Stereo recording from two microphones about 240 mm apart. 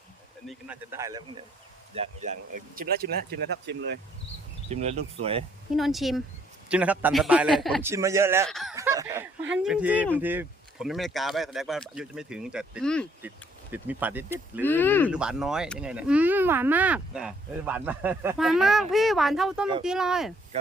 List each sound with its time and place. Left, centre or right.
0.4 s speech: centre
2.7 s speech: right
4.7 s speech: right
5.7 s speech: centre
7.8 s speech: centre
8.4 s speech: centre
8.7 s speech: centre
13.2 s speech: centre
14.6 s speech: centre
15.1 s speech: centre